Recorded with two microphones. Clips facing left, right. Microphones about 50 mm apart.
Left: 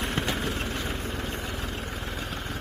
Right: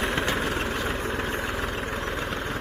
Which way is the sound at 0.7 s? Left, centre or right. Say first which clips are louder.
Right 4 dB; right.